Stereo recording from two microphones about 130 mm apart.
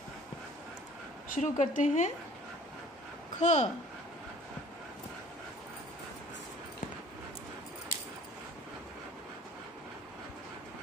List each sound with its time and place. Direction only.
1.3 s speech: 80° left
3.3 s speech: 60° left (ahead or behind)